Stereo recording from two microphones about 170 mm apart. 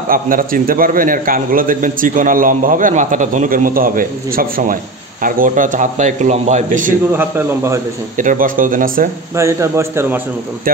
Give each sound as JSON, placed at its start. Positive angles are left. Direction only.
{"t": 0.1, "sound": "a man's voice", "side_deg": -55}
{"t": 7.2, "sound": "a man's voice", "side_deg": -15}
{"t": 8.2, "sound": "a man's voice", "side_deg": -50}
{"t": 9.3, "sound": "a man's voice", "side_deg": -15}